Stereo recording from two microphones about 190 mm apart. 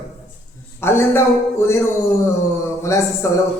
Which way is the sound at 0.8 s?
15° left (ahead or behind).